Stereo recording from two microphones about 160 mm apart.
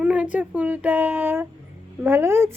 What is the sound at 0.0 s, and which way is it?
A child's voice, 10° right (ahead or behind).